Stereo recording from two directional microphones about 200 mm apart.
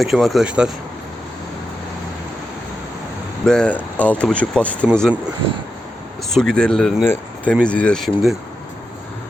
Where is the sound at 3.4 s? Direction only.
5° left (ahead or behind).